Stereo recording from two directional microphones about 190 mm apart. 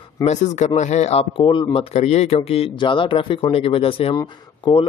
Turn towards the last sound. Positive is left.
turn(degrees=25)  # may be behind; listen again after turning